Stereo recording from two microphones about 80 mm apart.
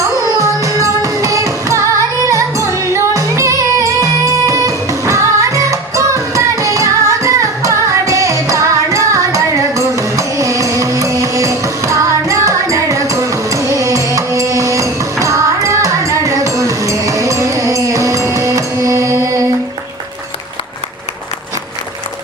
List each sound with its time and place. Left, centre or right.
0.3 s music: right